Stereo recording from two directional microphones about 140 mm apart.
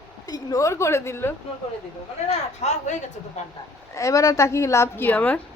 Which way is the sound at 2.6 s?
55° left (ahead or behind).